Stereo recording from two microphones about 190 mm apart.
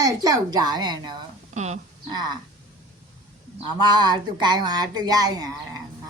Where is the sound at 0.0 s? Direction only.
20° right (ahead or behind).